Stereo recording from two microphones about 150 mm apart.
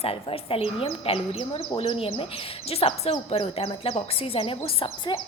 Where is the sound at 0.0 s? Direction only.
40° left (ahead or behind).